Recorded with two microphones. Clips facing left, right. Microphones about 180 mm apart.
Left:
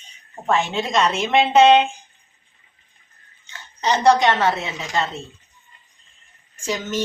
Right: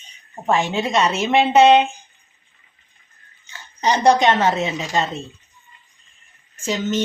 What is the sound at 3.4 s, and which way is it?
Speech, 10° right (ahead or behind).